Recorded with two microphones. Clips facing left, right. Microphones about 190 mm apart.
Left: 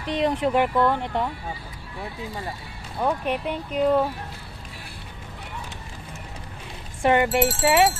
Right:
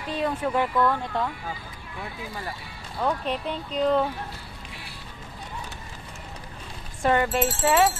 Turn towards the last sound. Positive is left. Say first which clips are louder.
# left 2 dB
turn(degrees=15)  # may be behind; listen again after turning